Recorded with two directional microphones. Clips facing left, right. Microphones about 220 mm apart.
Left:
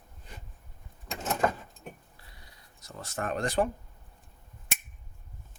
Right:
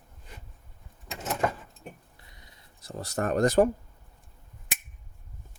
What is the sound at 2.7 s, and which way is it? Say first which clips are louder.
Speech: right 5 dB; 35° right (ahead or behind).